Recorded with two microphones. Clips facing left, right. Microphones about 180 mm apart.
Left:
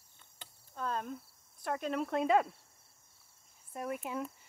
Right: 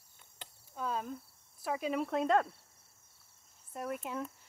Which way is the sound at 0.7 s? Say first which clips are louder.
Even; 5° right (ahead or behind).